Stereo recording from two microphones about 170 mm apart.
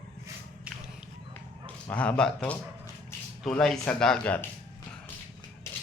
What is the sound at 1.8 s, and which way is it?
A man's voice, 5° left (ahead or behind).